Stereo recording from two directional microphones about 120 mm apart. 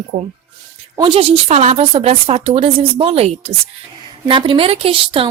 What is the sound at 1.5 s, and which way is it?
Speech, 70° right (ahead or behind).